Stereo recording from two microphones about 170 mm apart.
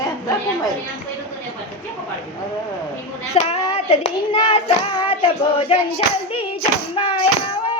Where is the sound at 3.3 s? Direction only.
35° left (ahead or behind).